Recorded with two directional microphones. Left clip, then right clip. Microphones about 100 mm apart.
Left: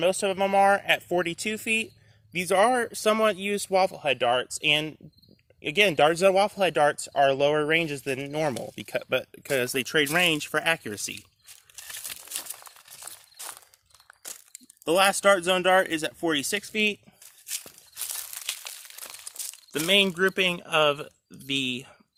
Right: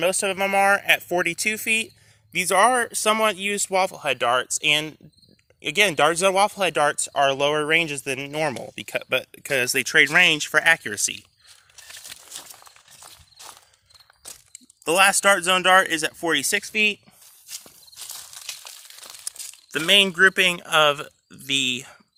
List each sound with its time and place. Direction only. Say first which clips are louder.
0.0 s speech: right 2 dB; 5° right (ahead or behind)
11.4 s a sound: left 1 dB; 35° left (ahead or behind)
13.1 s walk: left 1 dB; 15° left (ahead or behind)
14.2 s crunch: even; 5° right (ahead or behind)
14.8 s speech: right 3 dB; centre (ahead or behind)
18.7 s a sound: left 1 dB; centre (ahead or behind)
19.2 s speech: right 2 dB; 5° right (ahead or behind)